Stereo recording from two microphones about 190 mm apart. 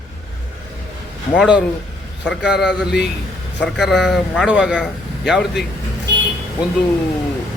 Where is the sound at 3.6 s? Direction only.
Centre (ahead or behind).